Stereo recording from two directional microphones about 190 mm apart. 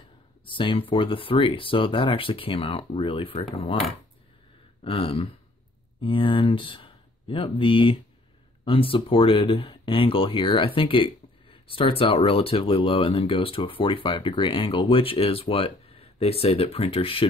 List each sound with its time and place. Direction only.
0.5 s speech: 25° left (ahead or behind)
4.8 s speech: 30° left (ahead or behind)